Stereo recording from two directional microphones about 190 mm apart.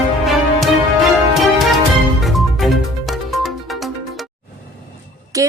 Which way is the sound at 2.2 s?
Centre (ahead or behind).